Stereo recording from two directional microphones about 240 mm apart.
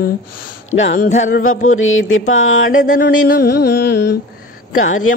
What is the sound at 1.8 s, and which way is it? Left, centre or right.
Mantra, left.